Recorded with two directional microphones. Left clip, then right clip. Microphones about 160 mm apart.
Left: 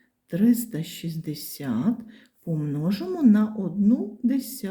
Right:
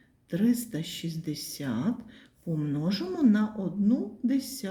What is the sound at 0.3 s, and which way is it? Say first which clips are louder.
Speech: left 5 dB; 25° left (ahead or behind).